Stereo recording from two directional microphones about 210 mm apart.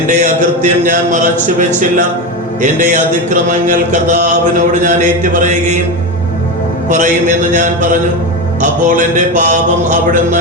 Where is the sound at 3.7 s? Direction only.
35° right (ahead or behind).